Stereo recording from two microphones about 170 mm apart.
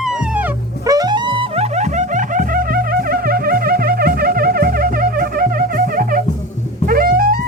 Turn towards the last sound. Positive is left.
turn(degrees=-60)  # may be behind; listen again after turning